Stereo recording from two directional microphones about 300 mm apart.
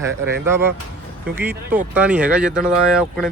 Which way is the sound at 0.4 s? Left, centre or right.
Centre.